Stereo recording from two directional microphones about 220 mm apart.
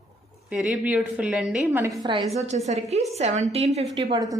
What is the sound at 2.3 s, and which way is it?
A woman's voice, 30° right (ahead or behind).